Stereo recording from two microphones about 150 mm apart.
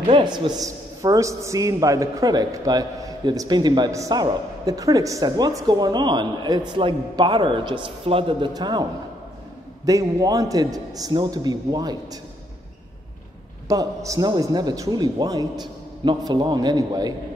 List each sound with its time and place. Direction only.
0.1 s a man's voice: 30° right (ahead or behind)
9.8 s a man's voice: 20° right (ahead or behind)
13.7 s a man's voice: 20° right (ahead or behind)